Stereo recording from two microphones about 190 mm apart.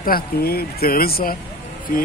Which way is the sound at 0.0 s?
50° left (ahead or behind).